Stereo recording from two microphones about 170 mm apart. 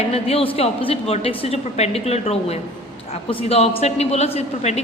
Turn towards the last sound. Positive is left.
turn(degrees=40)  # may be behind; listen again after turning